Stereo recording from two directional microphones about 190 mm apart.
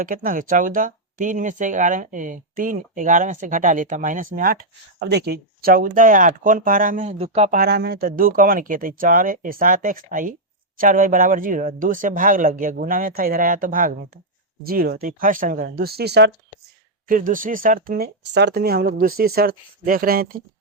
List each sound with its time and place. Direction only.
0.0 s speech: 50° right (ahead or behind)
4.9 s speech: 60° right (ahead or behind); by 7.6 s 35° right (ahead or behind)
7.6 s speech: 55° right (ahead or behind)
17.1 s speech: 45° right (ahead or behind)